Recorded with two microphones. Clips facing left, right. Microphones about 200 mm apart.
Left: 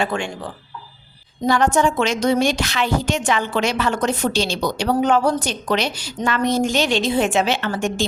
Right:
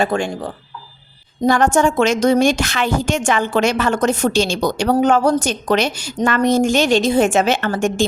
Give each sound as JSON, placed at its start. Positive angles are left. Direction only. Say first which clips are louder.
{"t": 0.0, "sound": "a woman's voice", "louder": "right 5 dB", "side_deg": -40}